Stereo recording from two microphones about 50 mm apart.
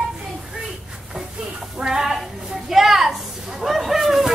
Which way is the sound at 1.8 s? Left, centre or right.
Centre.